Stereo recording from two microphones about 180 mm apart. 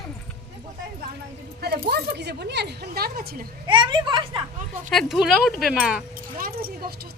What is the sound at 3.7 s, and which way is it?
Speech, 25° right (ahead or behind).